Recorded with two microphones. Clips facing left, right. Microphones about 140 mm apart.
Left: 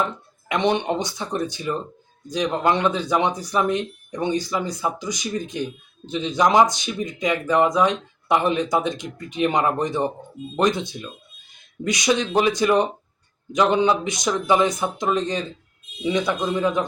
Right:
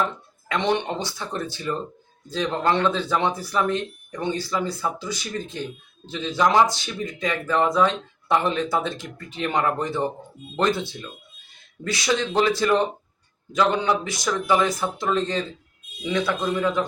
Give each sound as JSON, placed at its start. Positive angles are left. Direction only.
{"t": 0.0, "sound": "speech", "side_deg": 15}